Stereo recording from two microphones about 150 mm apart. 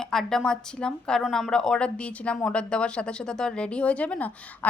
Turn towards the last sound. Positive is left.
turn(degrees=10)  # may be behind; listen again after turning